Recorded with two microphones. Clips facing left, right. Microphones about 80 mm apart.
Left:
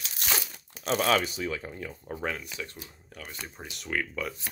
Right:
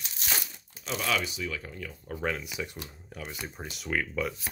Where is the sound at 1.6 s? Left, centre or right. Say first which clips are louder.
Left 2 dB; left.